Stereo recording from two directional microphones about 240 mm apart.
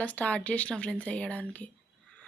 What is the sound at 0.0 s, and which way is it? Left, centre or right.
Speech, centre.